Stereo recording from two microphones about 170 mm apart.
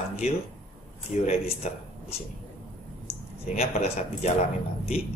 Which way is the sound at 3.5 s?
40° left (ahead or behind).